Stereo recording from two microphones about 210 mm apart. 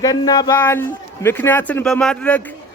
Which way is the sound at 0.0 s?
20° left (ahead or behind).